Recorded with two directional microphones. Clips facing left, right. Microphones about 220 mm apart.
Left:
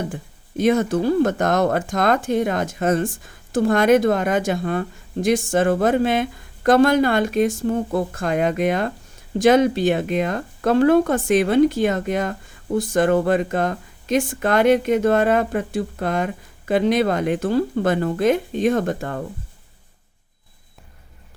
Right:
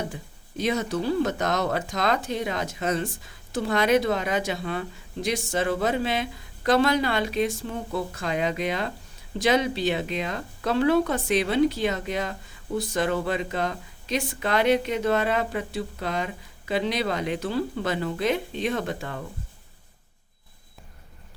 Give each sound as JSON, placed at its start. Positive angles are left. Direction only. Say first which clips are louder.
{"t": 0.1, "sound": "speech", "louder": "left 6 dB", "side_deg": 50}